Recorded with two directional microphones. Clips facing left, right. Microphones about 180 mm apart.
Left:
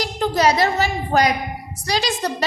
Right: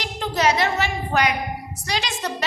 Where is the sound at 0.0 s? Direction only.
35° left (ahead or behind).